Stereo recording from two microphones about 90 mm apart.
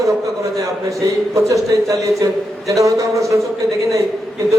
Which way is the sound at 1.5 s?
35° right (ahead or behind).